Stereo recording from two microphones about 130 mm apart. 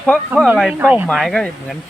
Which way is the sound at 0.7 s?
10° right (ahead or behind).